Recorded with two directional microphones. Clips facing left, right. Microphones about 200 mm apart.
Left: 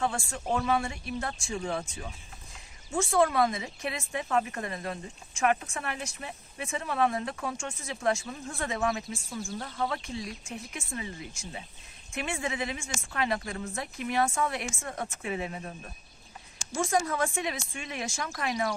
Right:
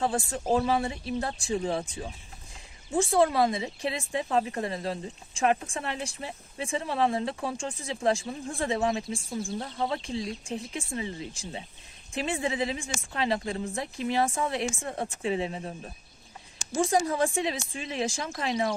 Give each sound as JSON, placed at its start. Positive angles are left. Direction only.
{"t": 0.0, "sound": "speech", "side_deg": -35}
{"t": 18.3, "sound": "speech", "side_deg": -20}